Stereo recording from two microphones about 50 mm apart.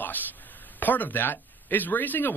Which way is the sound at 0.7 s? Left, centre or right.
Left.